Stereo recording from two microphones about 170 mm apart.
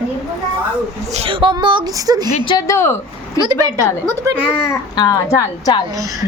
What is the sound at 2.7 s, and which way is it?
Speech, 15° left (ahead or behind).